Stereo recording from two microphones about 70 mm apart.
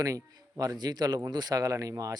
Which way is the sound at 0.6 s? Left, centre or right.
Right.